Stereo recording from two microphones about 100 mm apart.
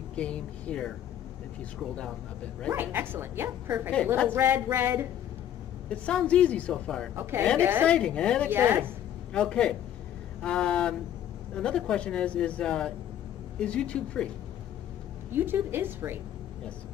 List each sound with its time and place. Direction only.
0.1 s speech: 10° left (ahead or behind)
2.7 s speech: 20° right (ahead or behind)
5.9 s speech: 10° left (ahead or behind)
7.2 s speech: 25° right (ahead or behind)
7.9 s speech: 10° left (ahead or behind)
8.5 s speech: 20° right (ahead or behind)
9.3 s speech: 10° left (ahead or behind)
15.3 s speech: 20° right (ahead or behind)